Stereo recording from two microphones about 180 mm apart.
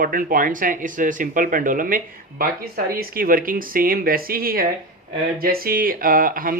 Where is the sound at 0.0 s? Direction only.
50° right (ahead or behind).